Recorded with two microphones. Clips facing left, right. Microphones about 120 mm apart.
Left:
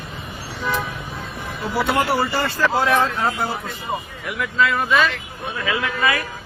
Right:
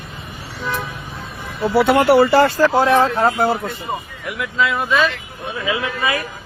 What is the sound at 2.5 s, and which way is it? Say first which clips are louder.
Speech: right 5 dB; 30° right (ahead or behind).